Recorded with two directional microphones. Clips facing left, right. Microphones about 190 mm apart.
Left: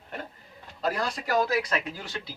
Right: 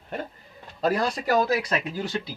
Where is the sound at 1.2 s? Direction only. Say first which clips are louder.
Right 2 dB; 25° right (ahead or behind).